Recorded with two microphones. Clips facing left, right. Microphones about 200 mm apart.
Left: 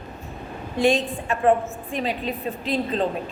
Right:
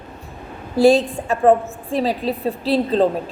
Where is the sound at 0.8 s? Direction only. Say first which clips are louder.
Right 7 dB; 35° right (ahead or behind).